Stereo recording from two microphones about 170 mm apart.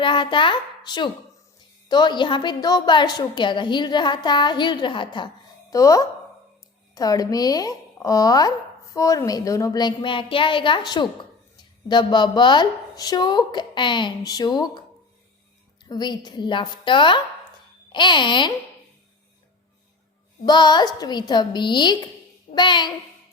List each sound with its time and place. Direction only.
0.0 s speech: 30° left (ahead or behind)
20.4 s speech: 25° left (ahead or behind)